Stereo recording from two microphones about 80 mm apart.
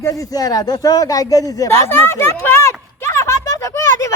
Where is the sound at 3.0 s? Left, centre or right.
Left.